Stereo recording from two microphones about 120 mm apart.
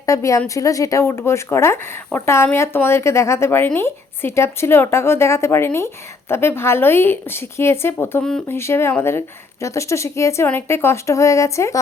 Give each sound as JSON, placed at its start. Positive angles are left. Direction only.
{"t": 0.0, "sound": "speech", "side_deg": 25}
{"t": 8.2, "sound": "speech", "side_deg": 5}
{"t": 8.4, "sound": "speech", "side_deg": 20}